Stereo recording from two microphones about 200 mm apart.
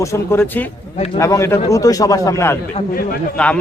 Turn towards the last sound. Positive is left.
turn(degrees=5)  # may be behind; listen again after turning